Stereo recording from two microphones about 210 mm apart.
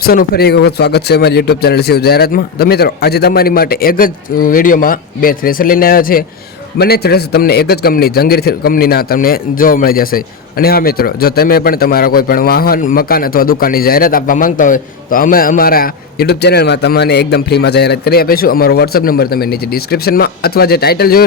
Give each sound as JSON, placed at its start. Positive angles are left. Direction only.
{"t": 0.0, "sound": "a man's voice", "side_deg": 45}